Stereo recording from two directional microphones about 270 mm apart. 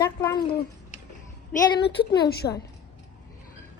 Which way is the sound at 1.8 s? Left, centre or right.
Left.